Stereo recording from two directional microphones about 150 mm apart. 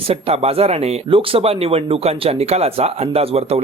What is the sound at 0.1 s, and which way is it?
Speech, 40° right (ahead or behind).